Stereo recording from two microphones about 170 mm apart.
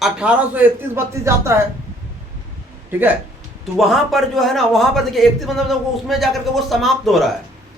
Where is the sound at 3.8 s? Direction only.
Centre (ahead or behind).